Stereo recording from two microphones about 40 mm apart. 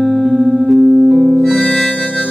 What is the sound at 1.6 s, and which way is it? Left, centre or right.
Harmonica, centre.